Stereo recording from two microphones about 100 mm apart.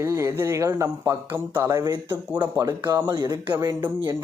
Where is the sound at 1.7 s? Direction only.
35° right (ahead or behind).